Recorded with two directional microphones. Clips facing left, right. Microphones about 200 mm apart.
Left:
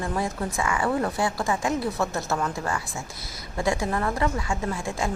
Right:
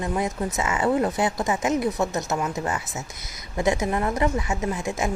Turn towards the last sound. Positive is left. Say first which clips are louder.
# right 2 dB
turn(degrees=-20)  # may be behind; listen again after turning